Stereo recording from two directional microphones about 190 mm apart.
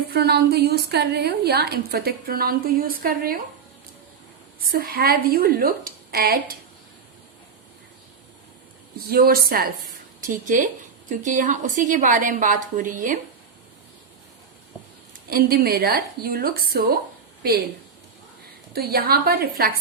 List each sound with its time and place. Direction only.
0.1 s a woman's voice: 55° right (ahead or behind)
4.7 s a woman's voice: 50° right (ahead or behind)
9.0 s a woman's voice: 50° right (ahead or behind)
15.3 s a woman's voice: 50° right (ahead or behind)
18.7 s a woman's voice: 55° right (ahead or behind)